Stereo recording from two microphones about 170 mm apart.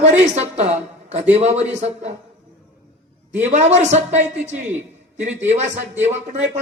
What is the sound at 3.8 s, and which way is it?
Speech, 40° right (ahead or behind).